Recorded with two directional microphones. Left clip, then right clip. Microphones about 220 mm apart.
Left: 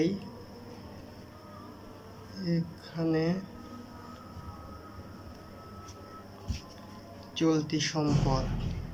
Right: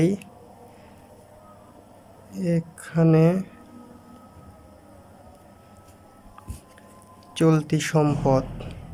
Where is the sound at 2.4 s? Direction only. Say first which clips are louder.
Right 8 dB; 55° right (ahead or behind).